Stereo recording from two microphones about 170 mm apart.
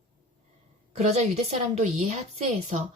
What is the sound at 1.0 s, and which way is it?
Speech, 40° right (ahead or behind).